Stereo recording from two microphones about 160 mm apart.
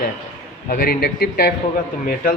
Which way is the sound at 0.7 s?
70° left (ahead or behind).